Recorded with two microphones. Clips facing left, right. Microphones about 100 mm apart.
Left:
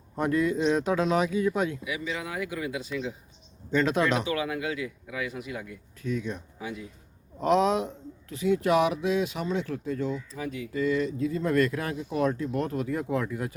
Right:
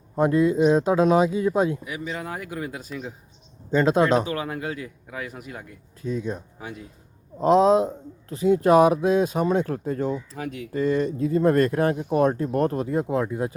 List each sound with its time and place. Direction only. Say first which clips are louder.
0.2 s speech: right 6 dB; 25° right (ahead or behind); by 3.1 s 40° right (ahead or behind)
3.7 s a man's voice: right 5 dB; 30° right (ahead or behind)
10.3 s speech: right 2 dB; 65° right (ahead or behind)
10.7 s a man's voice: right 4 dB; 45° right (ahead or behind); by 13.5 s 30° right (ahead or behind)